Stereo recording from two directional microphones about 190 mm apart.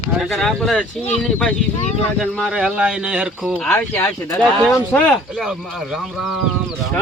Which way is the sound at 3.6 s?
5° left (ahead or behind).